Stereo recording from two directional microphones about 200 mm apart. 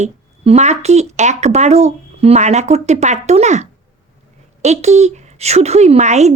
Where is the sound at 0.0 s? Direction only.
35° right (ahead or behind).